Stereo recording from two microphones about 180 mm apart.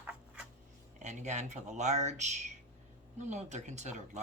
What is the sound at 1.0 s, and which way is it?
Speech, 40° right (ahead or behind).